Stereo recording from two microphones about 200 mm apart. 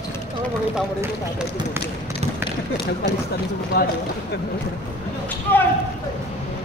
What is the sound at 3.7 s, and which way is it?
Speech, 50° left (ahead or behind).